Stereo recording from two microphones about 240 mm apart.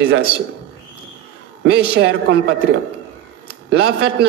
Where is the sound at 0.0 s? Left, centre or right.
Right.